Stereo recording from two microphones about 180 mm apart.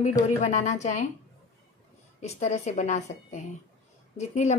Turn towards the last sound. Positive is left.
turn(degrees=40)  # may be behind; listen again after turning